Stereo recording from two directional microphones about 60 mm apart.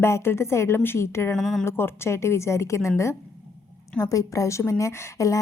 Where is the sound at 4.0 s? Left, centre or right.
Left.